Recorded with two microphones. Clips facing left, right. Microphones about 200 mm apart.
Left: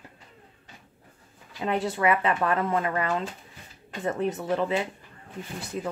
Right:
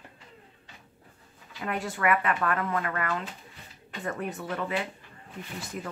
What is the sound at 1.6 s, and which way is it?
Speech, 25° left (ahead or behind).